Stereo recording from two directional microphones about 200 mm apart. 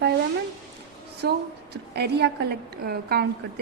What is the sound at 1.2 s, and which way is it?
A woman's voice, 55° right (ahead or behind).